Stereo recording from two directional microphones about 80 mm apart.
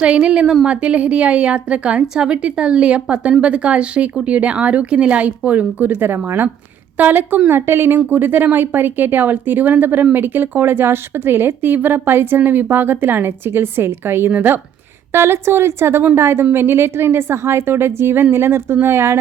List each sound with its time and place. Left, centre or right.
0.0 s a woman's voice: centre; by 19.2 s right